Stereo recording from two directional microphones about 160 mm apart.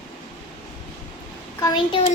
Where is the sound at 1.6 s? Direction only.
25° left (ahead or behind).